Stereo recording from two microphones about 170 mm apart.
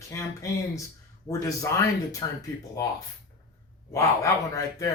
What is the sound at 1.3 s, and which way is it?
Speech, 20° left (ahead or behind).